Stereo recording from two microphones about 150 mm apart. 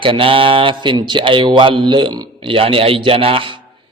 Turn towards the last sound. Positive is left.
turn(degrees=-35)  # may be behind; listen again after turning